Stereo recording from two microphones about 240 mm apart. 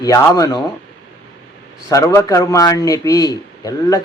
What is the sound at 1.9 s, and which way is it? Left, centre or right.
Speech, centre.